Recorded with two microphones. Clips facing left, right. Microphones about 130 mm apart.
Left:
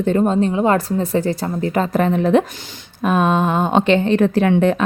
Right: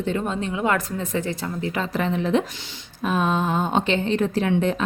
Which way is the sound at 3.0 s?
60° left (ahead or behind).